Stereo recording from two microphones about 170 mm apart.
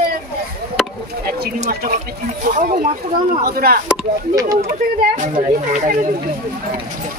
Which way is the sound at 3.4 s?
65° right (ahead or behind).